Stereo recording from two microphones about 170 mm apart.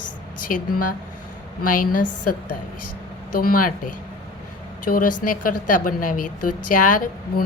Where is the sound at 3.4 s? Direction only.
55° left (ahead or behind).